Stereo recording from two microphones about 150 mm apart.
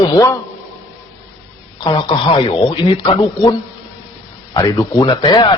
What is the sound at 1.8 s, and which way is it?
Speech, 30° left (ahead or behind).